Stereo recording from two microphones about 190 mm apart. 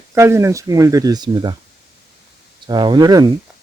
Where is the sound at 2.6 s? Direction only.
25° right (ahead or behind).